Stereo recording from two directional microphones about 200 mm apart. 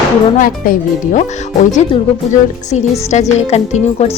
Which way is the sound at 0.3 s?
45° left (ahead or behind).